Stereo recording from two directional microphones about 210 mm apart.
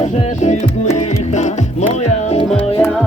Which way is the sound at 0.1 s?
35° left (ahead or behind).